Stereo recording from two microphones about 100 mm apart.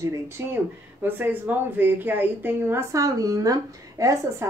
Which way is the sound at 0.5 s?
20° right (ahead or behind).